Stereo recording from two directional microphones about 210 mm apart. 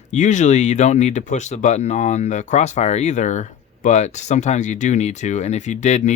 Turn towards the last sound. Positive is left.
turn(degrees=35)  # may be behind; listen again after turning